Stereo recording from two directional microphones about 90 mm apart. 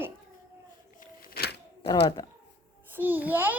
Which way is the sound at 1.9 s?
50° left (ahead or behind).